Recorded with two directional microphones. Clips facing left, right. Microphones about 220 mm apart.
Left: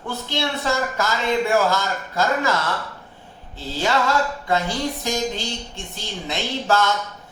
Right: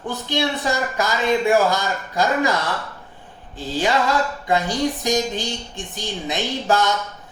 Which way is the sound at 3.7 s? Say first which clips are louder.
Right 1 dB; 15° right (ahead or behind).